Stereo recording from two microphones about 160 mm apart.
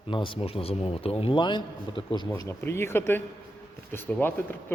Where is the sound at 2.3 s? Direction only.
15° left (ahead or behind).